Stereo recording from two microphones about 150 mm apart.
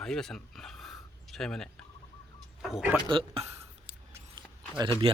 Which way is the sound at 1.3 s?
5° left (ahead or behind).